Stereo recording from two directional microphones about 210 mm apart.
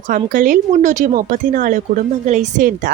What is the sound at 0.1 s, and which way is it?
A woman's voice, 40° right (ahead or behind).